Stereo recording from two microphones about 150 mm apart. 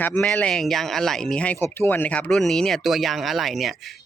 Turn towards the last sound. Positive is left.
turn(degrees=0)  # may be behind; listen again after turning